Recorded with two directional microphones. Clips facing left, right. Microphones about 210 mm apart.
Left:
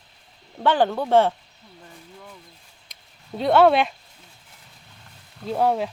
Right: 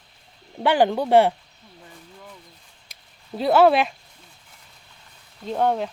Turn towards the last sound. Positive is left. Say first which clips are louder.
# left 1 dB
turn(degrees=5)  # may be behind; listen again after turning